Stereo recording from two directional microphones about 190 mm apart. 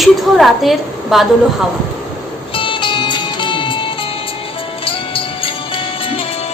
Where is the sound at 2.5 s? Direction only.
25° left (ahead or behind).